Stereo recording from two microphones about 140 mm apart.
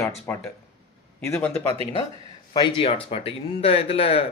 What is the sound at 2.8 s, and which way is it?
Speech, 45° left (ahead or behind).